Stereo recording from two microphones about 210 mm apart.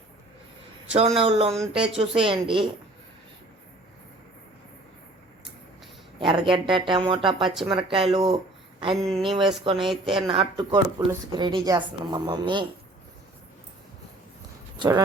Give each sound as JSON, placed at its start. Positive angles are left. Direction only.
{"t": 0.9, "sound": "speech", "side_deg": -30}
{"t": 1.5, "sound": "speech", "side_deg": 0}
{"t": 2.0, "sound": "speech", "side_deg": -25}
{"t": 6.1, "sound": "speech", "side_deg": -25}
{"t": 7.3, "sound": "speech", "side_deg": 0}
{"t": 7.7, "sound": "speech", "side_deg": -25}
{"t": 9.0, "sound": "speech", "side_deg": 0}
{"t": 9.8, "sound": "speech", "side_deg": -25}
{"t": 14.8, "sound": "speech", "side_deg": -20}